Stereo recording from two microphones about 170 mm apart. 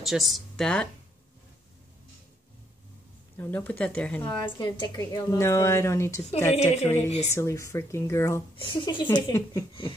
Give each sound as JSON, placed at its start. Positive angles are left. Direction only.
{"t": 0.0, "sound": "speech", "side_deg": 0}
{"t": 3.3, "sound": "speech", "side_deg": 10}
{"t": 4.4, "sound": "a woman's voice", "side_deg": 25}
{"t": 6.5, "sound": "speech", "side_deg": 40}
{"t": 7.3, "sound": "speech", "side_deg": 15}
{"t": 8.5, "sound": "a woman's voice", "side_deg": 25}